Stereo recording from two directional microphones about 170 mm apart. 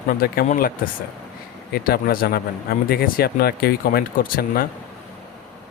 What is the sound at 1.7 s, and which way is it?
Speech, 65° left (ahead or behind).